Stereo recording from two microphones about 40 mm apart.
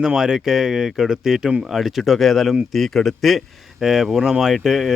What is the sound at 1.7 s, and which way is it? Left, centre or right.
Speech, centre.